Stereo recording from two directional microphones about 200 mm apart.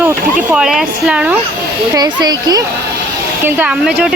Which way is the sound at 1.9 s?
20° right (ahead or behind).